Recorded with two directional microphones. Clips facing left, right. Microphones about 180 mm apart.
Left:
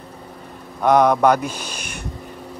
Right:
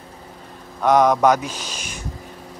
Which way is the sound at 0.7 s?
10° left (ahead or behind).